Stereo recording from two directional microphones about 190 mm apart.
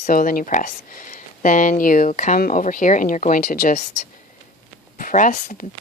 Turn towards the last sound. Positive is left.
turn(degrees=40)  # may be behind; listen again after turning